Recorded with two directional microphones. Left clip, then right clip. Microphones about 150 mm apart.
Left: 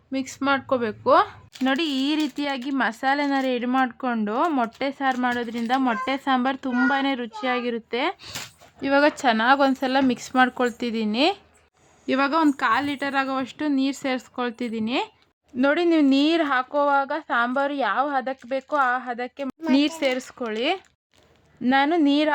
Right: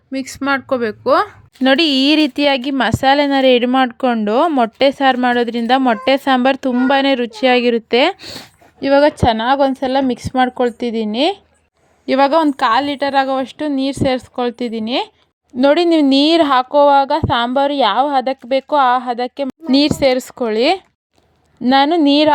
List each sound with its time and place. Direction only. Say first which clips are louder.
0.1 s a woman's voice: right 5 dB; 25° right (ahead or behind)
1.6 s a woman's voice: right 11 dB; 45° right (ahead or behind)
8.8 s a woman's voice: right 8 dB; 30° right (ahead or behind)